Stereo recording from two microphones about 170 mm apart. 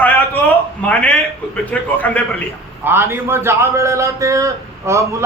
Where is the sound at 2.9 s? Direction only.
15° right (ahead or behind).